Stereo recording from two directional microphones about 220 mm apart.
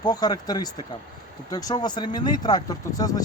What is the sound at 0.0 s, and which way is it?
Speech, 15° left (ahead or behind).